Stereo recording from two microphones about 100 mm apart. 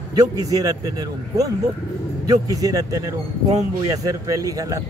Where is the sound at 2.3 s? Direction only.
35° right (ahead or behind).